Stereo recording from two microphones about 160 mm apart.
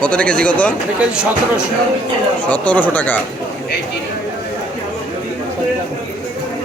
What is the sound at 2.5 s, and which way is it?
Speech, 10° left (ahead or behind).